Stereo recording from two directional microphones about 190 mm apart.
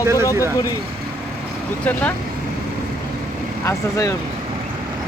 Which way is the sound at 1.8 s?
10° left (ahead or behind).